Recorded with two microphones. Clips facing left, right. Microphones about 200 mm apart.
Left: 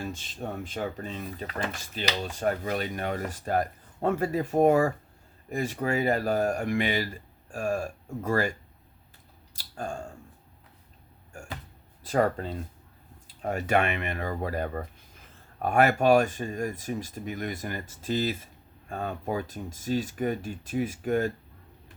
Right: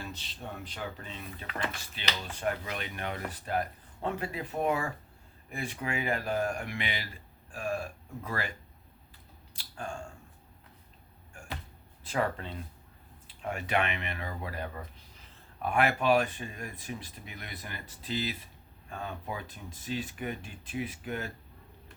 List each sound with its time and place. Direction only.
0.0 s speech: 50° left (ahead or behind)
9.6 s speech: 40° left (ahead or behind)
12.0 s speech: 40° left (ahead or behind)